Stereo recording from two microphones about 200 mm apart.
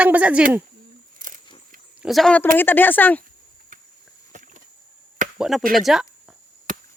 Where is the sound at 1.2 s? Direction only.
40° right (ahead or behind).